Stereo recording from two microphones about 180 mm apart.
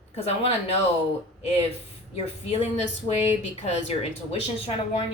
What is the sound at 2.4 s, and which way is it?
Speech, 35° left (ahead or behind).